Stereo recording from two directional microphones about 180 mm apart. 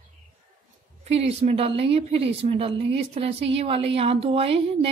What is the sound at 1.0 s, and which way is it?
A woman's voice, 35° right (ahead or behind).